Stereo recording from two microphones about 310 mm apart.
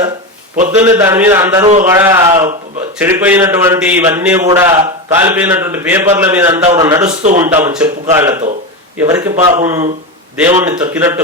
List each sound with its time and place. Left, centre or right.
0.5 s a man's voice: right
0.8 s a man's voice: centre